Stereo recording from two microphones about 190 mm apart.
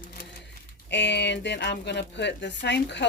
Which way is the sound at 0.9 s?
65° left (ahead or behind).